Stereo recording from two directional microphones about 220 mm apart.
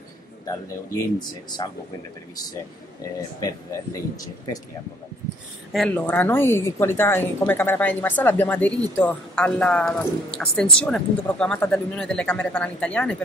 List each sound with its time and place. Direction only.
1.6 s speech: 20° left (ahead or behind)
3.0 s a woman's voice: 15° left (ahead or behind)
5.7 s a woman's voice: 5° left (ahead or behind)